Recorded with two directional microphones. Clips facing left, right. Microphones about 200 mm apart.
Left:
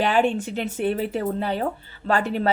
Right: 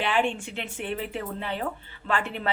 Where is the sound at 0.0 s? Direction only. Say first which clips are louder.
Left 5 dB; 40° left (ahead or behind).